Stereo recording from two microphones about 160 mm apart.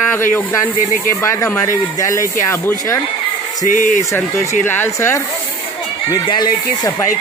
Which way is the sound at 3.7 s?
55° left (ahead or behind).